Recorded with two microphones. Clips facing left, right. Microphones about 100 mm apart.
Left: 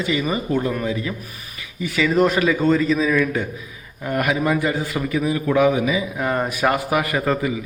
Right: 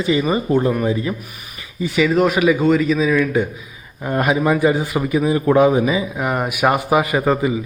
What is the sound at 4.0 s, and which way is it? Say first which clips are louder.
A man's voice: right 3 dB; 25° right (ahead or behind).